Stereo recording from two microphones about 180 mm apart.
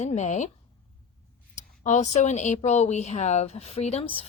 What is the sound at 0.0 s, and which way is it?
Speech, 40° left (ahead or behind).